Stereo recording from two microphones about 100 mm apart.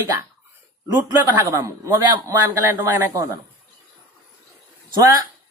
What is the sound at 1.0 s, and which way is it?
Speech, 30° right (ahead or behind).